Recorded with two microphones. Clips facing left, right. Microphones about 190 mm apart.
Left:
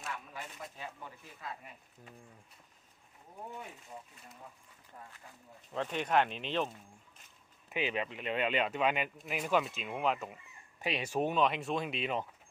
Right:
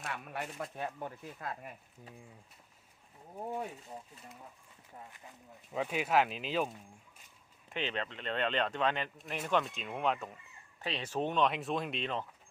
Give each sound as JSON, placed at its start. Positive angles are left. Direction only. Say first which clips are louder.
{"t": 0.3, "sound": "speech", "louder": "right 6 dB", "side_deg": -60}
{"t": 5.7, "sound": "speech", "louder": "even", "side_deg": -5}
{"t": 7.7, "sound": "speech", "louder": "left 2 dB", "side_deg": 10}